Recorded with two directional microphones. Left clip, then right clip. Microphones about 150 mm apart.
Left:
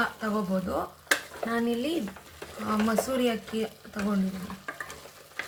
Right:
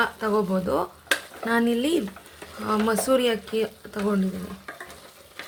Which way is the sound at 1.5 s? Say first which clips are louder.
Right 6 dB; 85° right.